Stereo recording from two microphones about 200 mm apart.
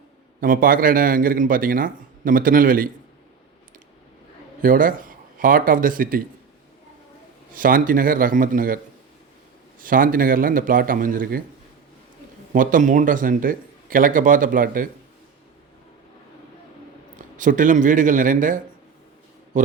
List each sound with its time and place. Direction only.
0.3 s speech: 45° right (ahead or behind)
4.6 s a man's voice: 45° right (ahead or behind)
7.5 s speech: 45° right (ahead or behind)
9.8 s speech: 45° right (ahead or behind)
12.5 s speech: 40° right (ahead or behind)
17.3 s speech: 40° right (ahead or behind)
19.5 s mantra: 40° right (ahead or behind)